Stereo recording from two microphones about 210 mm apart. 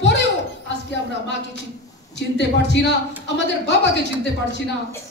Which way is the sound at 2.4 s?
55° left (ahead or behind).